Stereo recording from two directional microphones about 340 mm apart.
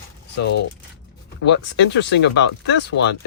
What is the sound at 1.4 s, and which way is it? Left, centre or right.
Speech, left.